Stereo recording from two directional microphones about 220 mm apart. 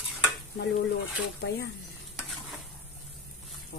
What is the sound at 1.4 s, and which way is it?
Speech, 50° left (ahead or behind).